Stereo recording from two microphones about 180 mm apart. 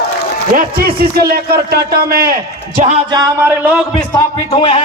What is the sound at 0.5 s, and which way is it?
A man's voice, 55° right (ahead or behind).